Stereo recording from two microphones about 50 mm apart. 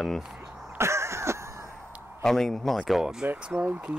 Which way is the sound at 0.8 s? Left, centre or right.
Right.